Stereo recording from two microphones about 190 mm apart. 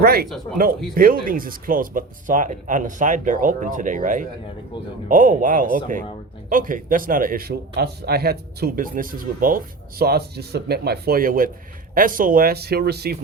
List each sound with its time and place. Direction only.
0.0 s a man's voice: 55° right (ahead or behind)